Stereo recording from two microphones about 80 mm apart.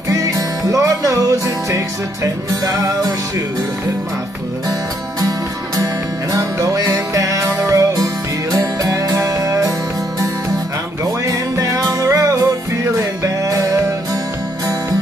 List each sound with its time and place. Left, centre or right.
0.1 s music: right
6.3 s music: right
11.2 s music: right